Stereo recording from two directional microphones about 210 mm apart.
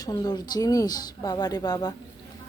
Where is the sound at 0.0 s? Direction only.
20° left (ahead or behind).